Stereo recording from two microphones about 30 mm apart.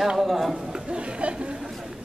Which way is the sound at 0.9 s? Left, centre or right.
Right.